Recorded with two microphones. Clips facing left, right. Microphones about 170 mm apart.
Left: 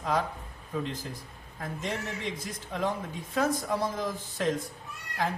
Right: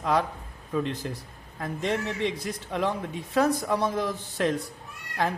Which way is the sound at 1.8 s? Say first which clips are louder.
Right 7 dB; 65° right (ahead or behind).